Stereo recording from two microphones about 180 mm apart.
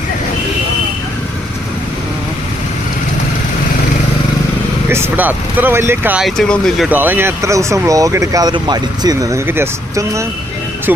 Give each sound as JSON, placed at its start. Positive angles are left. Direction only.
{"t": 4.9, "sound": "speech", "side_deg": -10}
{"t": 6.9, "sound": "speech", "side_deg": -10}